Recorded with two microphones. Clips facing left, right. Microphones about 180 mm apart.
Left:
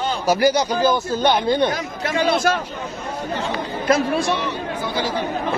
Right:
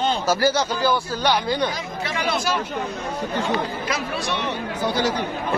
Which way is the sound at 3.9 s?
50° left (ahead or behind).